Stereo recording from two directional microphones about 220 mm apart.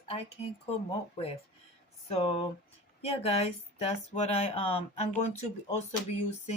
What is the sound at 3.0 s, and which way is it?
Speech, 25° left (ahead or behind).